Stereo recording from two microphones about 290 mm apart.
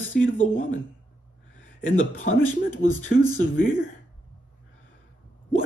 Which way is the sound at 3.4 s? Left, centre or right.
Left.